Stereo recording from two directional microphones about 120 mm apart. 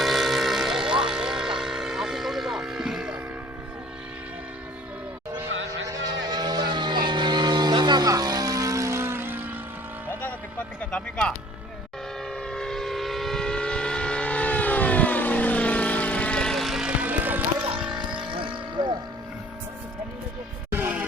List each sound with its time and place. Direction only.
0.0 s a sound: centre (ahead or behind)
5.9 s vehicle: 35° right (ahead or behind); by 9.5 s 15° right (ahead or behind)
10.8 s music: 10° left (ahead or behind)
12.5 s vehicle: 5° left (ahead or behind); by 17.4 s 15° right (ahead or behind)
18.2 s vehicle: 45° right (ahead or behind)
20.7 s music: 15° right (ahead or behind)